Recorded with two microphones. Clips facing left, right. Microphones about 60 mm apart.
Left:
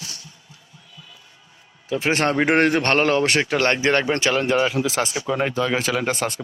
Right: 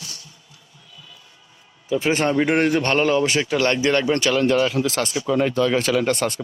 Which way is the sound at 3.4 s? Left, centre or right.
Left.